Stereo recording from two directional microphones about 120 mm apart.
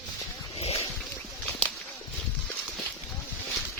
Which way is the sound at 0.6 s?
60° left (ahead or behind).